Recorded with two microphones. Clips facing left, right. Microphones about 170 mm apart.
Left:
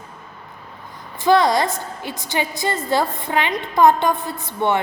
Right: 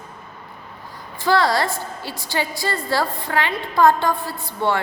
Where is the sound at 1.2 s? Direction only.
20° left (ahead or behind).